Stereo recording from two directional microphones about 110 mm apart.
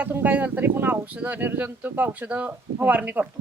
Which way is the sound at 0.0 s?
15° right (ahead or behind).